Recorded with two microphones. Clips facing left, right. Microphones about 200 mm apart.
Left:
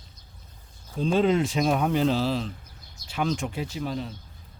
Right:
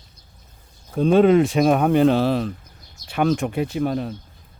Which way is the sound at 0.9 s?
60° right (ahead or behind).